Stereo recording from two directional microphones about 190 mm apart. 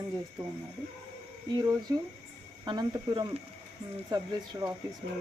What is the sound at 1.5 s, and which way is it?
Speech, 20° right (ahead or behind).